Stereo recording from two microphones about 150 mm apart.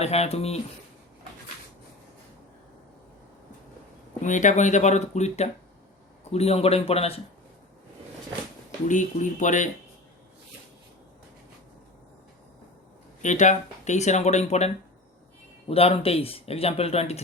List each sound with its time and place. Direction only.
0.0 s speech: 45° left (ahead or behind)
4.2 s speech: 55° left (ahead or behind)
8.9 s speech: 55° left (ahead or behind)
13.2 s speech: 55° left (ahead or behind)
15.7 s speech: 40° left (ahead or behind)